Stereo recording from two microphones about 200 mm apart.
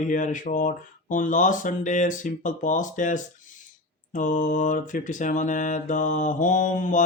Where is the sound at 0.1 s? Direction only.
40° left (ahead or behind).